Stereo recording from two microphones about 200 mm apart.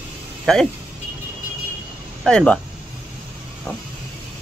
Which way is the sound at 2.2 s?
5° left (ahead or behind).